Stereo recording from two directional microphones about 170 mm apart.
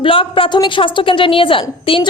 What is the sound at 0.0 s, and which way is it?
A woman's voice, 30° left (ahead or behind).